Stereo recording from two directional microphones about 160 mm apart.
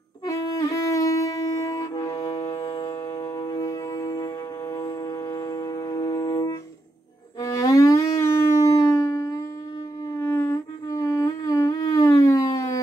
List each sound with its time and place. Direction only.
0.3 s music: 20° left (ahead or behind)
2.1 s music: 35° left (ahead or behind)
2.5 s a sound: 35° left (ahead or behind)
3.3 s music: 25° left (ahead or behind)
7.4 s shofar: 20° left (ahead or behind)
10.3 s humming: 20° left (ahead or behind)